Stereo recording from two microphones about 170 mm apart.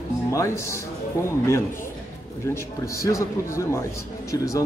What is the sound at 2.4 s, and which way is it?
A man's voice, 15° left (ahead or behind).